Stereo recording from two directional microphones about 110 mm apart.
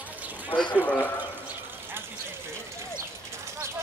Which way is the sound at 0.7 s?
15° left (ahead or behind).